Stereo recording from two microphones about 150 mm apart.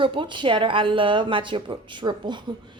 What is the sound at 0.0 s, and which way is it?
A woman's voice, 35° right (ahead or behind).